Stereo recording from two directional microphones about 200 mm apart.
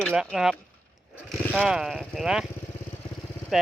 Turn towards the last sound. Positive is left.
turn(degrees=0)  # may be behind; listen again after turning